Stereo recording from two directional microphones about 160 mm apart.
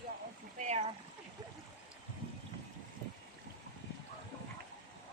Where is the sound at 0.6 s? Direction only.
45° right (ahead or behind).